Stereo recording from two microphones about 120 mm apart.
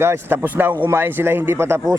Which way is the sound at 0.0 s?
20° right (ahead or behind).